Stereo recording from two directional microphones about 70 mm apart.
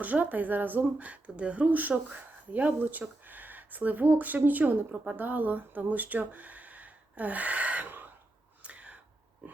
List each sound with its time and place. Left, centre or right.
0.0 s speech: right
8.6 s whispering: centre